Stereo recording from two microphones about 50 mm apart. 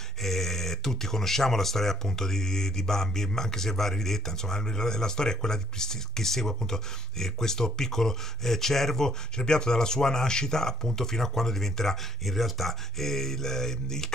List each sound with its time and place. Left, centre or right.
0.2 s speech: centre